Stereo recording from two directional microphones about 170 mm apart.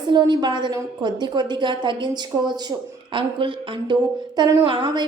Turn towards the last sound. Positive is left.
turn(degrees=-30)  # may be behind; listen again after turning